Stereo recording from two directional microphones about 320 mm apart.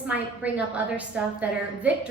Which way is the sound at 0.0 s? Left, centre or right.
Centre.